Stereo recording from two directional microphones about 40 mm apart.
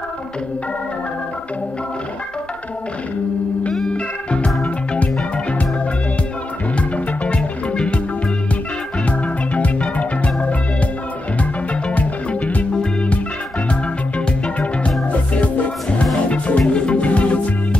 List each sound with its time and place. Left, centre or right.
3.9 s music: left
6.8 s music: left
9.0 s music: left
13.7 s music: left